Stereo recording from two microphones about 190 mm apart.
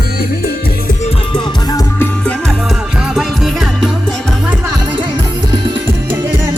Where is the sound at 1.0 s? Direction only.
25° left (ahead or behind).